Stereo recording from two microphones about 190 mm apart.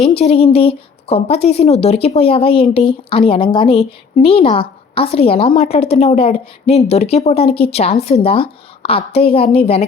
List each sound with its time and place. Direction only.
0.2 s a woman's voice: 30° left (ahead or behind)